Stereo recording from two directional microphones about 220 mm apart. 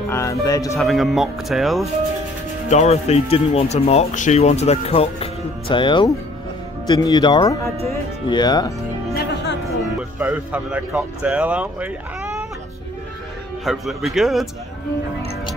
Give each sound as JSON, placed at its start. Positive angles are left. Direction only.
{"t": 0.1, "sound": "speech", "side_deg": 15}
{"t": 0.7, "sound": "speech", "side_deg": 0}
{"t": 2.7, "sound": "speech", "side_deg": 30}
{"t": 9.1, "sound": "music", "side_deg": 50}
{"t": 9.7, "sound": "speech", "side_deg": -5}
{"t": 13.7, "sound": "speech", "side_deg": 0}